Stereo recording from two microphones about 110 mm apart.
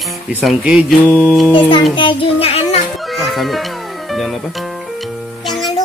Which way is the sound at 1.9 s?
50° left (ahead or behind).